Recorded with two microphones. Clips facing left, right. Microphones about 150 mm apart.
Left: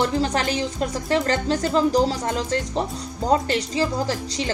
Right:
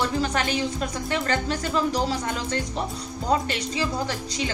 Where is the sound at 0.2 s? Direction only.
30° left (ahead or behind).